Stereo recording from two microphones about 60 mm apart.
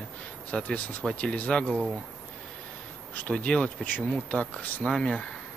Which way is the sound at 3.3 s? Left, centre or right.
Centre.